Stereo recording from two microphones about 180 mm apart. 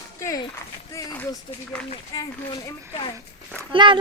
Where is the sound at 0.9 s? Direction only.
15° left (ahead or behind).